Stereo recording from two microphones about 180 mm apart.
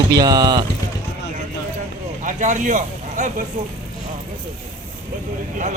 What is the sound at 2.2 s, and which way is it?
A man's voice, 45° right (ahead or behind).